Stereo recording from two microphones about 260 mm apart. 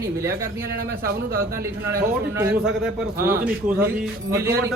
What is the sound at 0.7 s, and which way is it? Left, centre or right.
Speech, right.